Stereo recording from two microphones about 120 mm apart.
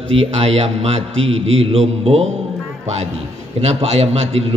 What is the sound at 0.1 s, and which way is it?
A man's voice, 60° right (ahead or behind).